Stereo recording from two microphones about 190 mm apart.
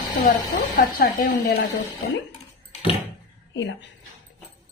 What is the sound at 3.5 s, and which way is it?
Speech, 75° left (ahead or behind).